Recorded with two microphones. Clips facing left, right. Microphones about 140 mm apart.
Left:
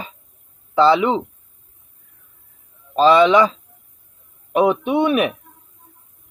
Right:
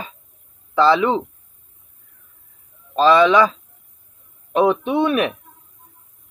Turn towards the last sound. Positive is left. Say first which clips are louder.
# left 1 dB
turn(degrees=15)  # may be behind; listen again after turning